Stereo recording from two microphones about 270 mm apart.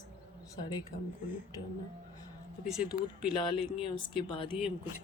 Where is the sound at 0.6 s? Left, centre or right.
Centre.